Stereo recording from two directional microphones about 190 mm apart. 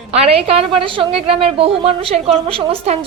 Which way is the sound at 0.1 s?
30° right (ahead or behind).